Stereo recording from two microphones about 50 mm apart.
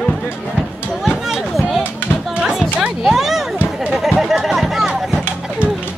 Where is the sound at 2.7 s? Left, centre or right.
Centre.